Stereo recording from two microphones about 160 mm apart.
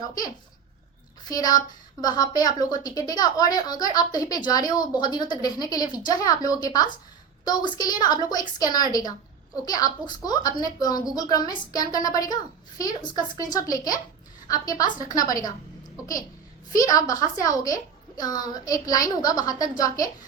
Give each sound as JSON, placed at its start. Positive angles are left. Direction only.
{"t": 1.2, "sound": "a woman's voice", "side_deg": 25}
{"t": 16.7, "sound": "a woman's voice", "side_deg": 20}